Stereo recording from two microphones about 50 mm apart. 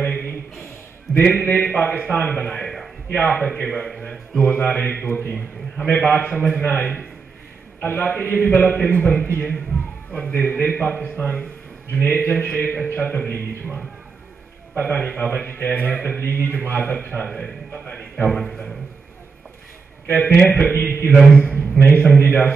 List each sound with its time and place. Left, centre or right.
1.2 s a man's voice: left
2.2 s a man's voice: left
2.6 s a sound: centre
3.1 s a man's voice: left
3.4 s a man's voice: left
4.4 s a man's voice: left
5.9 s a man's voice: left
7.8 s a man's voice: left
14.8 s a man's voice: left
15.4 s a man's voice: left
18.3 s a man's voice: centre
20.2 s a man's voice: left